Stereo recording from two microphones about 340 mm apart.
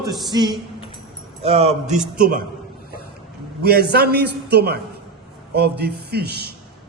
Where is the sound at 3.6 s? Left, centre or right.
Right.